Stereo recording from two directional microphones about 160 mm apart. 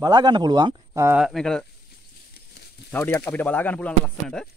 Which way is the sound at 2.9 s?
10° left (ahead or behind).